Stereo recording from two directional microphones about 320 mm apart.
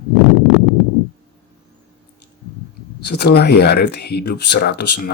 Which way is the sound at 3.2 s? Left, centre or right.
Left.